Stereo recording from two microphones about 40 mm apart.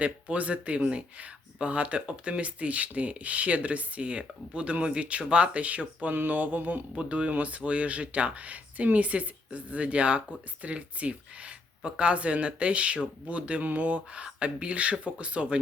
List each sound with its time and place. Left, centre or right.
0.0 s speech: right
6.1 s mantra: right
6.9 s speech: right